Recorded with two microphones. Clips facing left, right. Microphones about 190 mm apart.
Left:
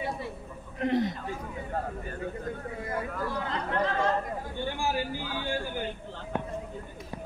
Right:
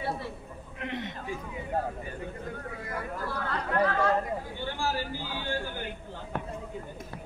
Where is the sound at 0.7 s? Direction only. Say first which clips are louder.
Left 9 dB; 35° left (ahead or behind).